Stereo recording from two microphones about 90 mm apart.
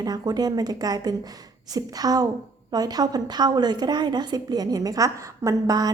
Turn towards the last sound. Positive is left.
turn(degrees=-45)  # may be behind; listen again after turning